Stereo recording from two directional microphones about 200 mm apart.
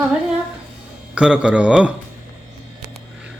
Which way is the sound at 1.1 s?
5° right (ahead or behind).